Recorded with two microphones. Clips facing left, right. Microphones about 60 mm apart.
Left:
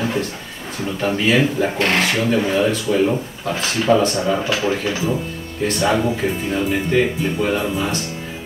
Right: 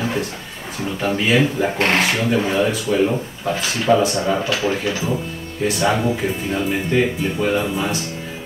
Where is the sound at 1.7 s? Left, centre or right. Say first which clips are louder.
Right 3 dB; right.